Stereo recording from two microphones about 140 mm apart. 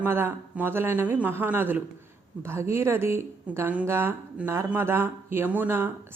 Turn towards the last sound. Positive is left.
turn(degrees=-15)  # may be behind; listen again after turning